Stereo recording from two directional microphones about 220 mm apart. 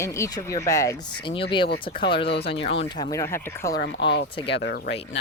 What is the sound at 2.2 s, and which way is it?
Speech, 50° left (ahead or behind).